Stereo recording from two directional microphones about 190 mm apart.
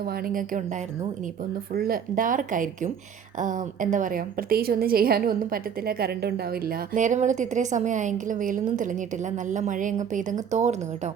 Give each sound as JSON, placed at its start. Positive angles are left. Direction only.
{"t": 0.0, "sound": "a woman's voice", "side_deg": -50}